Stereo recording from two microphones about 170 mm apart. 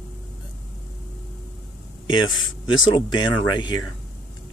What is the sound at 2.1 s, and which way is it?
Speech, 30° left (ahead or behind).